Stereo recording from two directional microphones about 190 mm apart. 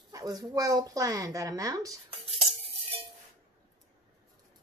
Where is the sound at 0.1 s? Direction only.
20° right (ahead or behind).